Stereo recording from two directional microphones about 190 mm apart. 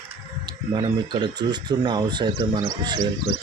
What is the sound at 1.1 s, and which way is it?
Speech, 25° right (ahead or behind).